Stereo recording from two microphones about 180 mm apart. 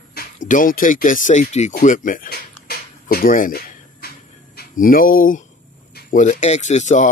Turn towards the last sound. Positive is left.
turn(degrees=40)  # may be behind; listen again after turning